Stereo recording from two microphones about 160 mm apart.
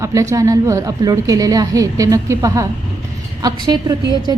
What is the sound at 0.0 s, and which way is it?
A woman's voice, 20° right (ahead or behind).